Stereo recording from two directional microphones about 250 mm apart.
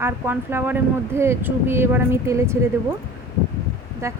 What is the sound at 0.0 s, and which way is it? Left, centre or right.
A woman's voice, centre.